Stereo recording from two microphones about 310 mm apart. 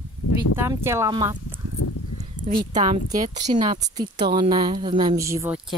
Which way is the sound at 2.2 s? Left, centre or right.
Right.